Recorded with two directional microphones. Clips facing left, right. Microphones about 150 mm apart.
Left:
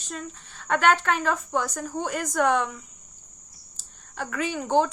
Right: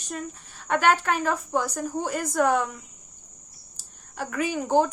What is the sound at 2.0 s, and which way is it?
Speech, 35° right (ahead or behind).